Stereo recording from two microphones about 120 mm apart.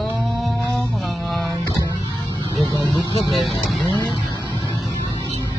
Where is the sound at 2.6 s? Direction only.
40° right (ahead or behind).